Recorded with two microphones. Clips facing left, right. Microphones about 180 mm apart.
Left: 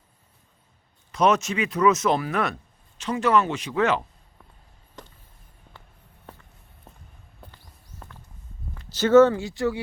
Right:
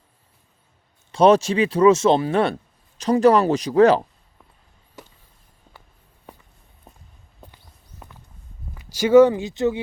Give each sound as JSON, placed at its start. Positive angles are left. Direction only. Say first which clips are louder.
{"t": 1.1, "sound": "speech", "louder": "right 6 dB", "side_deg": -30}
{"t": 5.0, "sound": "a sound", "louder": "right 1 dB", "side_deg": -5}
{"t": 6.3, "sound": "walk", "louder": "right 1 dB", "side_deg": -15}
{"t": 8.7, "sound": "speech", "louder": "right 2 dB", "side_deg": -10}